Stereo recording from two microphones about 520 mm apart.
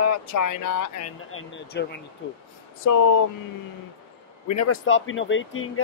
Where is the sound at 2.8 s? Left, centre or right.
Left.